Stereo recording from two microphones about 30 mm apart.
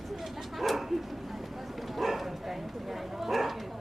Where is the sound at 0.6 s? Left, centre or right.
Centre.